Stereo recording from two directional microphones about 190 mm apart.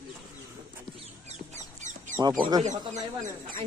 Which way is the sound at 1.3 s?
40° right (ahead or behind).